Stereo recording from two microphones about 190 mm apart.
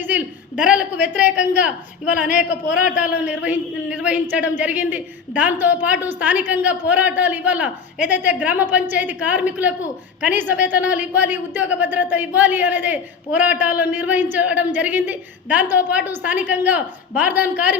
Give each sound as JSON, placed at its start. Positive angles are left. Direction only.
{"t": 0.1, "sound": "a woman's voice", "side_deg": -5}
{"t": 2.2, "sound": "a man's voice", "side_deg": 40}
{"t": 2.6, "sound": "a woman's voice", "side_deg": -5}